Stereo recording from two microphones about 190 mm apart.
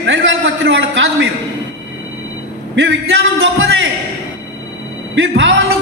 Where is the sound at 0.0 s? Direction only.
80° right.